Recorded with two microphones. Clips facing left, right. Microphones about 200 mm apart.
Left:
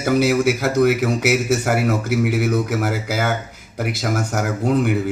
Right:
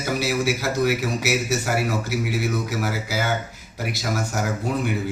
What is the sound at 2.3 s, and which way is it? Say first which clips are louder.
A man's voice: left 5 dB; 55° left (ahead or behind).